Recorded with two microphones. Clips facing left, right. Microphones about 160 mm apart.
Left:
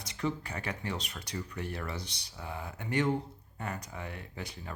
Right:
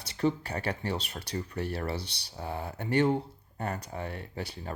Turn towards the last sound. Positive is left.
turn(degrees=-30)  # may be behind; listen again after turning